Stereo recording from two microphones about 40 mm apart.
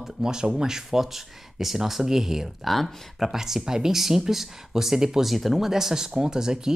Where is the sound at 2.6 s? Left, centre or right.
Centre.